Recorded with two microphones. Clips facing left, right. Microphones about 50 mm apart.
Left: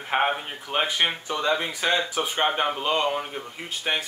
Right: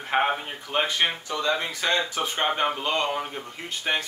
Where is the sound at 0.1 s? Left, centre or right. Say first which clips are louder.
Even; centre.